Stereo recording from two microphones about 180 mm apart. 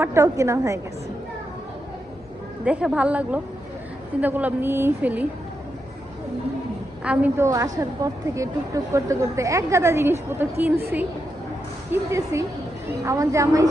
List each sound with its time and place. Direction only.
0.0 s a woman's voice: 15° right (ahead or behind)
2.6 s a woman's voice: 5° right (ahead or behind)
7.0 s a woman's voice: 5° right (ahead or behind)